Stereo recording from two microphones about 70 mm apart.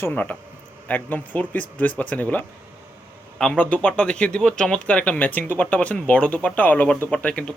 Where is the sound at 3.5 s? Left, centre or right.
Centre.